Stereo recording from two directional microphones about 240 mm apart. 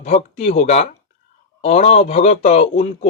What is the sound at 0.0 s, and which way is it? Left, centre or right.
Speech, left.